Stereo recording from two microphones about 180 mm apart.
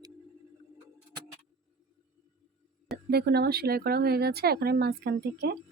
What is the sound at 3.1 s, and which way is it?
Speech, 60° right (ahead or behind).